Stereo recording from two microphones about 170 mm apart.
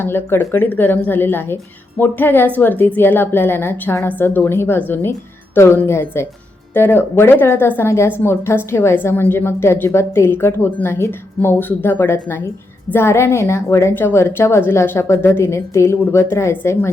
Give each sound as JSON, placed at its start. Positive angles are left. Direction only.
{"t": 0.0, "sound": "a woman's voice", "side_deg": 15}